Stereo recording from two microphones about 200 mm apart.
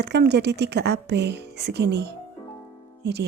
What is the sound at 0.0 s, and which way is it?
A woman's voice, 55° right (ahead or behind).